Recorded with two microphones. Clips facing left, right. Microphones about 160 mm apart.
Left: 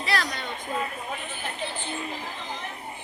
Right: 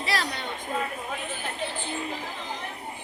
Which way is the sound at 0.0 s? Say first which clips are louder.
Left 1 dB; 30° right (ahead or behind).